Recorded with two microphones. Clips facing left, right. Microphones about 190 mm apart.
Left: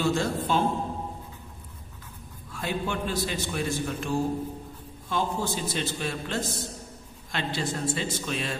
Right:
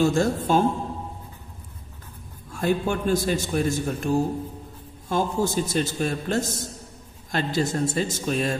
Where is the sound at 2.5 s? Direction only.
45° right (ahead or behind).